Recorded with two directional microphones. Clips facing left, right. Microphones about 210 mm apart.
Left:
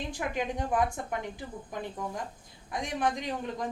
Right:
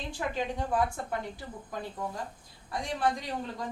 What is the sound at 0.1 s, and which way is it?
A woman's voice, 15° left (ahead or behind).